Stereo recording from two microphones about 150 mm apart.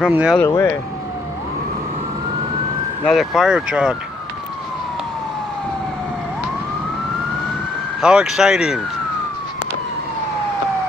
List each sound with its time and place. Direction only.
0.0 s speech: 5° right (ahead or behind)
0.5 s speech: 20° left (ahead or behind)
3.1 s speech: centre (ahead or behind)
8.0 s speech: 5° right (ahead or behind)